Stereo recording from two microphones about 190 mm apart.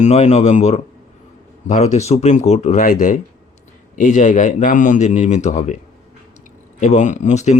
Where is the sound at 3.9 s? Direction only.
40° left (ahead or behind).